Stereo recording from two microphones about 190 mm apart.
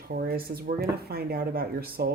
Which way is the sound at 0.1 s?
50° right (ahead or behind).